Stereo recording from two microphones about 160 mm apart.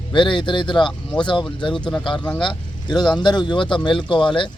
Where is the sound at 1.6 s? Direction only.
30° left (ahead or behind).